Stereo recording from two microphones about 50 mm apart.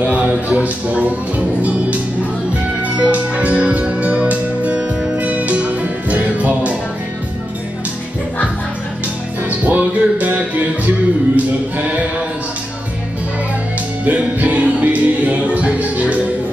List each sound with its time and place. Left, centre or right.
0.0 s speech: right
1.6 s music: right
3.0 s music: right
9.5 s music: right
11.3 s a sound: right
14.0 s music: right